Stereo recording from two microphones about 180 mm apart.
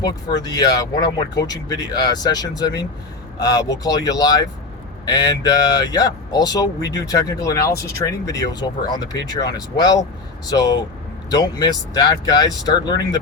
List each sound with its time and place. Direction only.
0.4 s speech: 20° left (ahead or behind)